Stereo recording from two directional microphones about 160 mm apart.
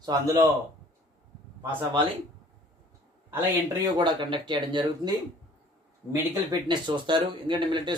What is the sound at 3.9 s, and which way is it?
Speech, 30° right (ahead or behind).